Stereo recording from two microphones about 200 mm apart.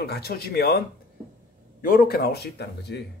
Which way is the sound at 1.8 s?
45° left (ahead or behind).